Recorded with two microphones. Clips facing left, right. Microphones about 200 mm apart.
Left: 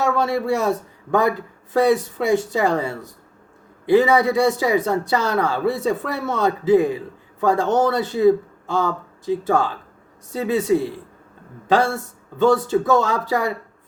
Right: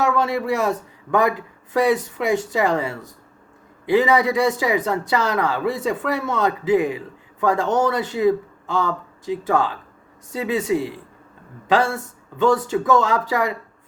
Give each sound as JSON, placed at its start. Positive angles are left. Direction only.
{"t": 0.0, "sound": "speech", "side_deg": 30}